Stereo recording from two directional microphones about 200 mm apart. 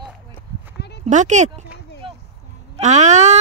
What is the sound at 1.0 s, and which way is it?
Speech, 35° right (ahead or behind).